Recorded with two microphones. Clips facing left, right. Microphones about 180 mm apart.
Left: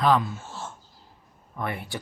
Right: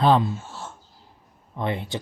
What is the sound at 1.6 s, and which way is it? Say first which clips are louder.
Speech: right 4 dB; 20° right (ahead or behind).